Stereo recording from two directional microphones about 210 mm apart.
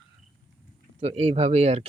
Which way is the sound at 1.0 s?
30° right (ahead or behind).